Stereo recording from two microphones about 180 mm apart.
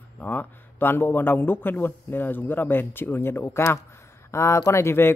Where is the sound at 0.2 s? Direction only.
10° left (ahead or behind).